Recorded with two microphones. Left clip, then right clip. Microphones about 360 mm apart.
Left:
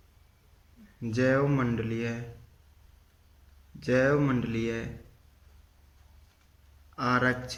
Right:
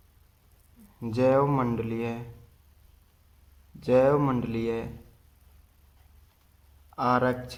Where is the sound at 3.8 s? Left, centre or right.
Centre.